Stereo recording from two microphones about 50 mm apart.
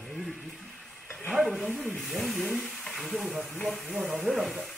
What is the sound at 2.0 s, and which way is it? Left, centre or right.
Speech, centre.